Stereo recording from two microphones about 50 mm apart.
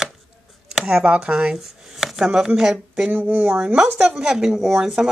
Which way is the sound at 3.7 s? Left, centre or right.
Centre.